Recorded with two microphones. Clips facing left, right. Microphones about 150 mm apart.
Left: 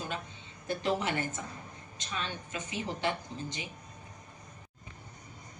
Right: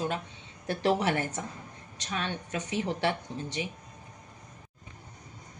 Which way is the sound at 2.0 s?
70° right (ahead or behind).